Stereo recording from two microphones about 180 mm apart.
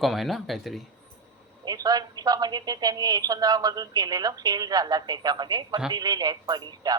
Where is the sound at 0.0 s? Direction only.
Centre (ahead or behind).